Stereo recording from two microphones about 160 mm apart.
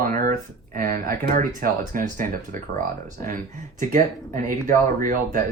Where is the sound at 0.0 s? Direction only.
60° right (ahead or behind).